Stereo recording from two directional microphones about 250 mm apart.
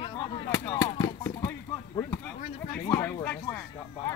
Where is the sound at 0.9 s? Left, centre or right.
Centre.